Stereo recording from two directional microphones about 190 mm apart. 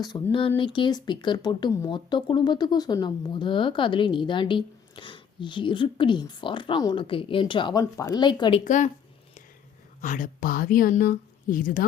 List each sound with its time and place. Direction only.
0.0 s speech: 25° left (ahead or behind)
8.6 s speech: 40° left (ahead or behind)
10.0 s a woman's voice: 45° left (ahead or behind)